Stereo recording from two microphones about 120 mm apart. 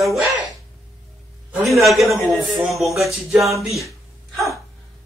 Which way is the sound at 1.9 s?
Centre (ahead or behind).